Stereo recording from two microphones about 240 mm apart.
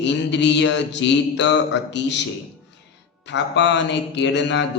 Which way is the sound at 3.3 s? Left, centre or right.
Left.